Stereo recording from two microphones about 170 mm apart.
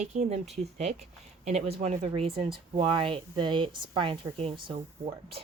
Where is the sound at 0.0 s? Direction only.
45° right (ahead or behind).